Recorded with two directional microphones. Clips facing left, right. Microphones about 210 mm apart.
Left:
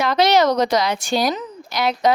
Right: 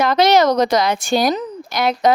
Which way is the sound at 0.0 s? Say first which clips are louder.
Right 2 dB; 50° right (ahead or behind).